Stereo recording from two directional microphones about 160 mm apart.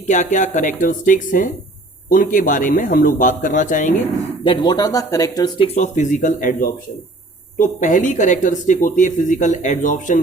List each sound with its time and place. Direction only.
0.1 s a man's voice: 50° left (ahead or behind)
4.4 s speech: 30° left (ahead or behind)
5.6 s speech: 45° left (ahead or behind)